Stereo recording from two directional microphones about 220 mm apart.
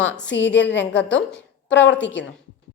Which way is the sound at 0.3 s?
55° left (ahead or behind).